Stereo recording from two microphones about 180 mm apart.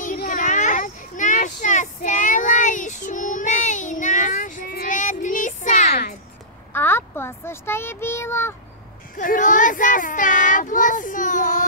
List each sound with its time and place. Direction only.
0.0 s children playing: 50° left (ahead or behind)
6.7 s child singing: 10° left (ahead or behind)
9.1 s child singing: 50° left (ahead or behind)